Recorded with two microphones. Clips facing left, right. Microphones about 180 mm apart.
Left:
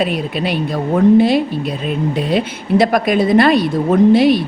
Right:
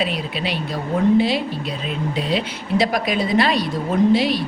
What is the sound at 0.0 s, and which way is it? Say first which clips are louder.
Speech: left 6 dB; 50° left (ahead or behind).